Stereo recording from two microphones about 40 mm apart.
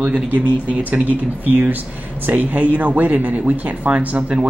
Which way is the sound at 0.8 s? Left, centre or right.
Right.